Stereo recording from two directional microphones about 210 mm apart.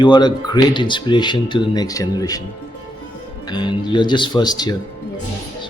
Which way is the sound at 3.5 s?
20° left (ahead or behind).